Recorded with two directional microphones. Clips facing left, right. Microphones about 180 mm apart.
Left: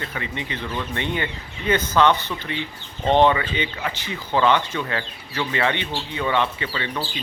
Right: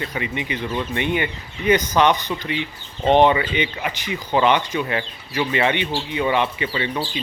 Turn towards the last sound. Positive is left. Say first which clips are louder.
# right 4 dB
turn(degrees=-20)  # may be behind; listen again after turning